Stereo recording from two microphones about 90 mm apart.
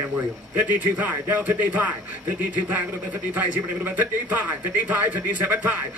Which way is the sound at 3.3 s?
20° right (ahead or behind).